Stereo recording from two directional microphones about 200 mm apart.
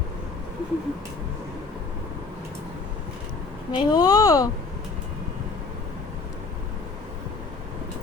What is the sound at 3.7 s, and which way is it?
Speech, 20° left (ahead or behind).